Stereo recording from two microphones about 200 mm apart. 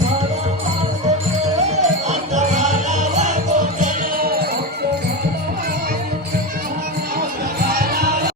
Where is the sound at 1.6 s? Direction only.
35° right (ahead or behind); by 4.9 s 50° right (ahead or behind).